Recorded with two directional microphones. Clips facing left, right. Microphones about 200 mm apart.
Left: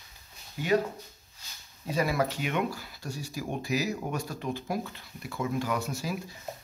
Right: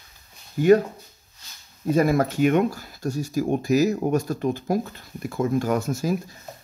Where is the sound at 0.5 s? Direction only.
50° right (ahead or behind).